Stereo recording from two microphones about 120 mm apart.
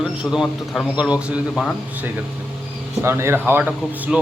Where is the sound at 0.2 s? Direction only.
5° right (ahead or behind).